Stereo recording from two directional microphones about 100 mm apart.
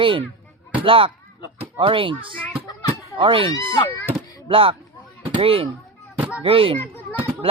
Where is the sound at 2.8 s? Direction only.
60° right (ahead or behind).